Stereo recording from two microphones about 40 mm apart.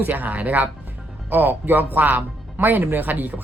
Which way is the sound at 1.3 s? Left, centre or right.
Right.